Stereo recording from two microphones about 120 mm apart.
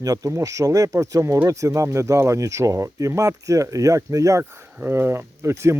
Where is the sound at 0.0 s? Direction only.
30° right (ahead or behind).